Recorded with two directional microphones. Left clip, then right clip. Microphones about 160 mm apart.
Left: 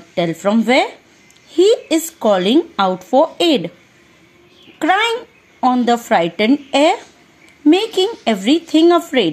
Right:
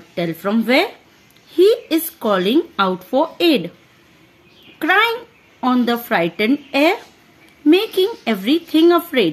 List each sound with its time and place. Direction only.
0.1 s speech: 20° left (ahead or behind)
4.7 s speech: 20° left (ahead or behind)